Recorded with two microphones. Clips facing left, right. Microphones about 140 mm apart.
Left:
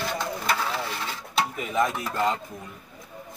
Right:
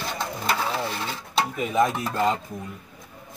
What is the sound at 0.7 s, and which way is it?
Sewing machine, 20° right (ahead or behind).